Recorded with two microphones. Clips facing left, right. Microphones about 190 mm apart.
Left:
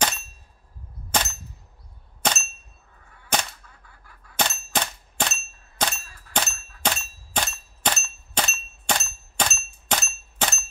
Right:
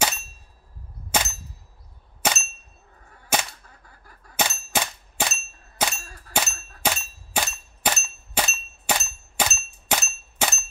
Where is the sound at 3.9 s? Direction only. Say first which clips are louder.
Right 2 dB; 40° right (ahead or behind).